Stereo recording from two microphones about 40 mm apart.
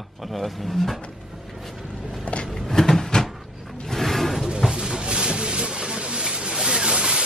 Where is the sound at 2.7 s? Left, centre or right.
Centre.